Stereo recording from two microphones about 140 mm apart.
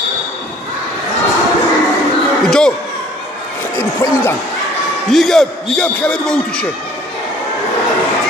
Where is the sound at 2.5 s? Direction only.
5° left (ahead or behind).